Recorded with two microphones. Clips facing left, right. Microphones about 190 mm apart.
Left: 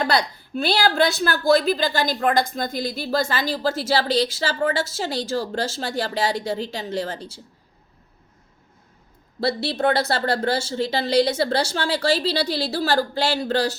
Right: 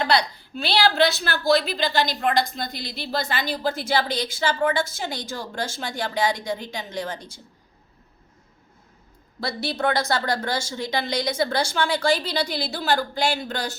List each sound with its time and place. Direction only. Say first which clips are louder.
0.0 s a woman's voice: even; 45° left (ahead or behind)
9.4 s a woman's voice: left 4 dB; 30° left (ahead or behind)